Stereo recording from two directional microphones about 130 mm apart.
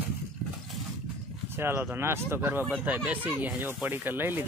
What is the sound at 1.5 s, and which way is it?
Speech, 20° right (ahead or behind).